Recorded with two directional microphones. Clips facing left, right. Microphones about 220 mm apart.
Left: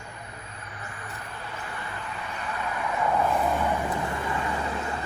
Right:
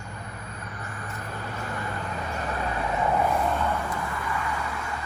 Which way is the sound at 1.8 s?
45° right (ahead or behind).